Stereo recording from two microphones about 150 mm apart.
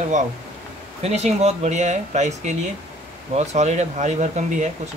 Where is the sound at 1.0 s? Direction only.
45° right (ahead or behind).